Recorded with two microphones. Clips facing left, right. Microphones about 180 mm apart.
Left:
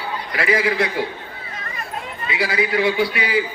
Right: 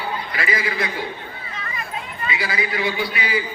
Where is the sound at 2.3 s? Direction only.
70° left (ahead or behind).